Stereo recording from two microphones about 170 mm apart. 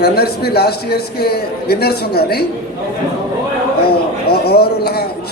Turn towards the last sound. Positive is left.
turn(degrees=70)  # may be behind; listen again after turning